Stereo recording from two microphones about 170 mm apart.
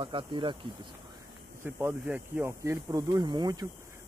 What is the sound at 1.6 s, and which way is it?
Speech, 15° right (ahead or behind).